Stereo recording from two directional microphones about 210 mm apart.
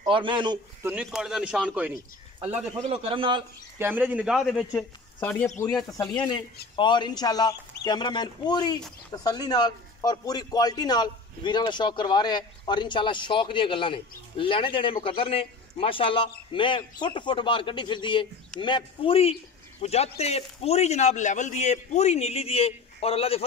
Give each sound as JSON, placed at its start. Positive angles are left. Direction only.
{"t": 0.1, "sound": "a man's voice", "side_deg": -25}
{"t": 0.8, "sound": "a man's voice", "side_deg": -5}
{"t": 2.9, "sound": "a man's voice", "side_deg": -25}
{"t": 3.7, "sound": "a man's voice", "side_deg": -10}
{"t": 5.9, "sound": "a man's voice", "side_deg": 20}